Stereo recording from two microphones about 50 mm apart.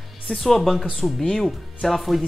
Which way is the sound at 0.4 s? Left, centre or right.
Centre.